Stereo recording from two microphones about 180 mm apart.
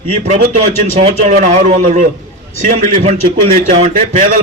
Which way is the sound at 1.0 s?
40° right (ahead or behind).